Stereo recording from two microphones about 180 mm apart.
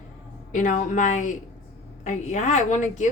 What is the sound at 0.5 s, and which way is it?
A woman's voice, 45° left (ahead or behind).